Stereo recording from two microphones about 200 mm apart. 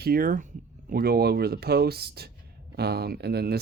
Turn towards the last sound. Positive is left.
turn(degrees=-55)  # may be behind; listen again after turning